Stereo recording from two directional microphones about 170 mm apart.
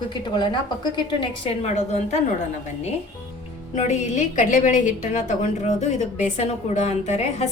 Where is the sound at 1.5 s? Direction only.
40° left (ahead or behind).